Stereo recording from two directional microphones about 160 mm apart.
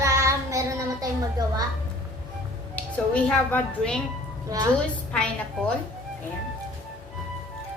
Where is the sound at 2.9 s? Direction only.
10° left (ahead or behind).